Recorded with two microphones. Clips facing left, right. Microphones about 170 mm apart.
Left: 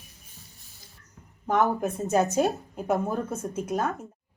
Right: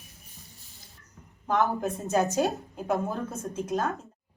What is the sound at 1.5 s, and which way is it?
A woman's voice, 20° left (ahead or behind).